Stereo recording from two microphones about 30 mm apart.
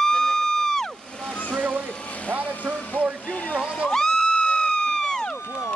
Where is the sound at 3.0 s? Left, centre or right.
Left.